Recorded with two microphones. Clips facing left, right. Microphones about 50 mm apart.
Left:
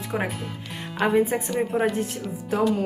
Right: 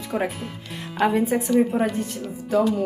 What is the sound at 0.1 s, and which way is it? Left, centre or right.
Speech, centre.